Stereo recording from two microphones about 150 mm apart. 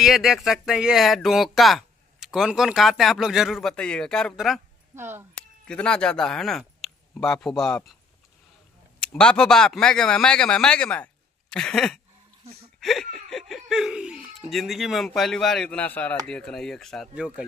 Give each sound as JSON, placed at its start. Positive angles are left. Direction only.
{"t": 0.0, "sound": "speech", "side_deg": 0}
{"t": 4.9, "sound": "speech", "side_deg": -15}
{"t": 5.3, "sound": "speech", "side_deg": 5}
{"t": 9.0, "sound": "speech", "side_deg": 5}